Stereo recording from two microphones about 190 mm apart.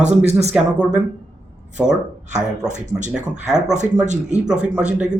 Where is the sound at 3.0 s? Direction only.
40° right (ahead or behind).